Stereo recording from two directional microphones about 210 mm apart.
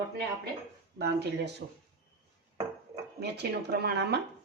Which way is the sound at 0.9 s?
55° right (ahead or behind).